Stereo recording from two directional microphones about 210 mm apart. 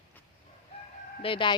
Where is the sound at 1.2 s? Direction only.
25° left (ahead or behind).